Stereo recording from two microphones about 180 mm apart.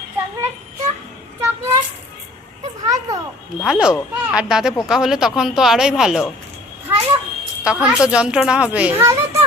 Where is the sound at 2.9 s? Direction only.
20° right (ahead or behind).